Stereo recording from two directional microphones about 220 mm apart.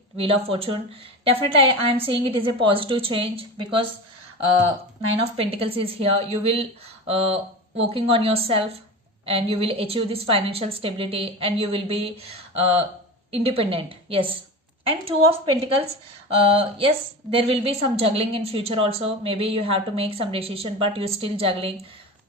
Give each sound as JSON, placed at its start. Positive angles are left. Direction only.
{"t": 0.2, "sound": "a woman's voice", "side_deg": -25}
{"t": 5.4, "sound": "a woman's voice", "side_deg": -25}
{"t": 13.3, "sound": "a woman's voice", "side_deg": -25}